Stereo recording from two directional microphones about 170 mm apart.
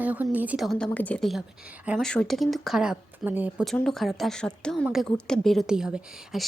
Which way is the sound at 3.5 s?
Centre (ahead or behind).